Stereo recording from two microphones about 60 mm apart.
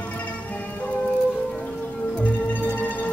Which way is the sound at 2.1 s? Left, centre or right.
Left.